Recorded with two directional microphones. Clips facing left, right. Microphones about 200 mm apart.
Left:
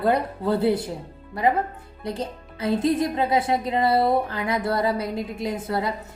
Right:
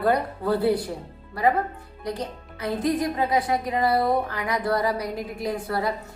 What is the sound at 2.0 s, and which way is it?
Speech, 25° left (ahead or behind).